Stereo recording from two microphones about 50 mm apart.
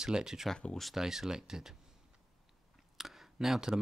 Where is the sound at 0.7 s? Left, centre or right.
Centre.